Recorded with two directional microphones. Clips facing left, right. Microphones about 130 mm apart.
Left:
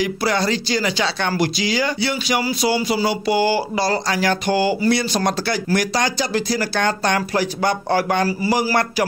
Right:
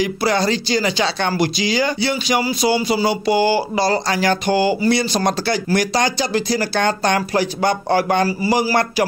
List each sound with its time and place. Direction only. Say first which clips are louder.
0.0 s speech: right 2 dB; 25° right (ahead or behind)